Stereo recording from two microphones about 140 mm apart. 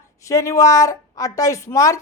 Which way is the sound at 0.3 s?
25° left (ahead or behind).